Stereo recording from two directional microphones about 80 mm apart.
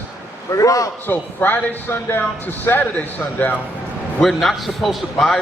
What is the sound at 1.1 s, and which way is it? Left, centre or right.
A man's voice, left.